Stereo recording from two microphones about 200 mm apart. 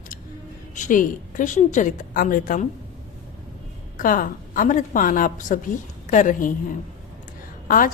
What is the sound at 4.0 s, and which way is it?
Music, 45° left (ahead or behind).